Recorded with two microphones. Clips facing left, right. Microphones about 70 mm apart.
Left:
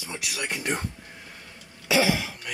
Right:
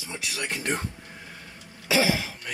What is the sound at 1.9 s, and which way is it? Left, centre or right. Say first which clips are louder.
Cough: left 1 dB; centre.